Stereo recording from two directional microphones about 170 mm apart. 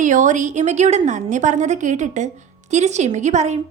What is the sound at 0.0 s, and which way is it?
A woman's voice, 45° right (ahead or behind).